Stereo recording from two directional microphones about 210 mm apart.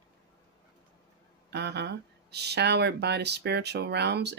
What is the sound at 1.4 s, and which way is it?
Speech, 55° right (ahead or behind).